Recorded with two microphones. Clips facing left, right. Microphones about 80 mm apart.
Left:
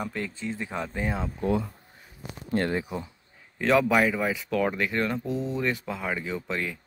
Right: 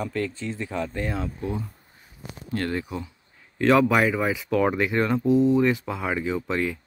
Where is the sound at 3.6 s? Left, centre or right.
Centre.